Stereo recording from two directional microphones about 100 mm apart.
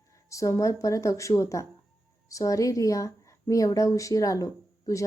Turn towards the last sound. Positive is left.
turn(degrees=35)  # may be behind; listen again after turning